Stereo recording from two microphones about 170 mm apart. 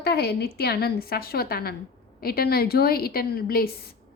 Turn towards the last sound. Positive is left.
turn(degrees=60)  # may be behind; listen again after turning